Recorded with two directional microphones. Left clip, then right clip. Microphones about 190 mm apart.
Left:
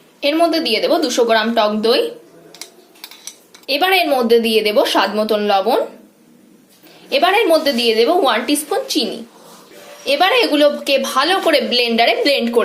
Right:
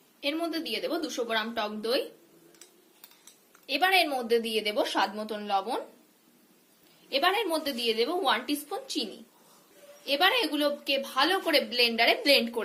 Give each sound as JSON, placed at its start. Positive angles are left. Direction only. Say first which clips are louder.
{"t": 0.2, "sound": "a woman's voice", "louder": "left 16 dB", "side_deg": 10}
{"t": 3.7, "sound": "a woman's voice", "louder": "left 10 dB", "side_deg": 0}
{"t": 7.1, "sound": "a woman's voice", "louder": "left 14 dB", "side_deg": 0}
{"t": 10.1, "sound": "a woman's voice", "louder": "left 12 dB", "side_deg": 5}